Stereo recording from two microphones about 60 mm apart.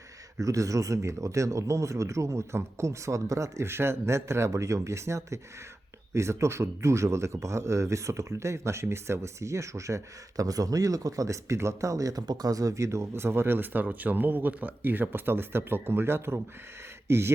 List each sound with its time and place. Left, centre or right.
0.3 s speech: right